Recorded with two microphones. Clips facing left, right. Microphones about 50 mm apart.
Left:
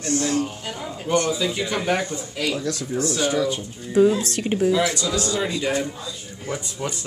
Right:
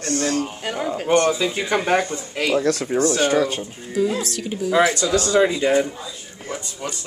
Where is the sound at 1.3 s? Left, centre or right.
Right.